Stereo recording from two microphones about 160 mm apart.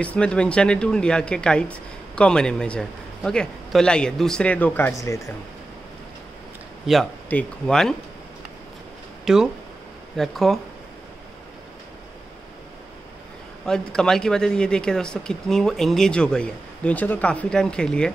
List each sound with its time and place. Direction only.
0.0 s speech: 5° left (ahead or behind)
6.9 s speech: 5° right (ahead or behind)
9.2 s speech: 5° right (ahead or behind)
13.7 s speech: 5° left (ahead or behind)